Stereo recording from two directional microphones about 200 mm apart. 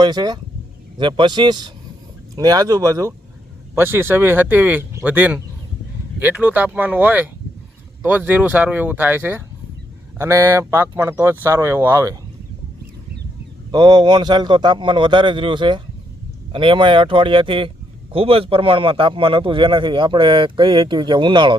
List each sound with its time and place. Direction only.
0.0 s a man's voice: 20° right (ahead or behind)
13.7 s a man's voice: 20° right (ahead or behind)